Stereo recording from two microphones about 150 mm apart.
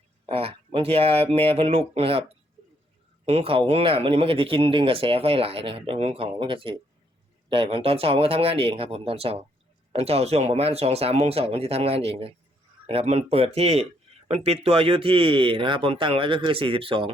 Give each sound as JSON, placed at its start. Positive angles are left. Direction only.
{"t": 0.3, "sound": "speech", "side_deg": -40}
{"t": 3.2, "sound": "speech", "side_deg": -40}